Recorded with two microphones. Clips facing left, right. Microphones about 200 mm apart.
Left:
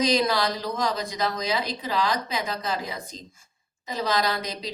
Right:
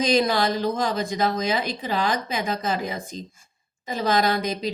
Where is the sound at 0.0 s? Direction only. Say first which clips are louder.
Right 2 dB; 25° right (ahead or behind).